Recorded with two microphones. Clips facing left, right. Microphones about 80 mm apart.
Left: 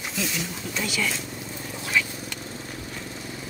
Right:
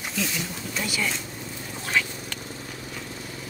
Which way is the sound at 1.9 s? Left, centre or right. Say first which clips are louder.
Even; right.